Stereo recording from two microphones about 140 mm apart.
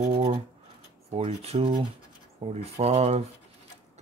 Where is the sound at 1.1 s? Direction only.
50° right (ahead or behind).